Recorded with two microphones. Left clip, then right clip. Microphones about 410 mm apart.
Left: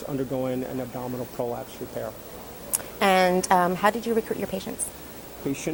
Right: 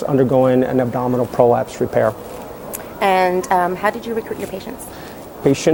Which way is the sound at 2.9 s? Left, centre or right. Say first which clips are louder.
Right 5 dB; left.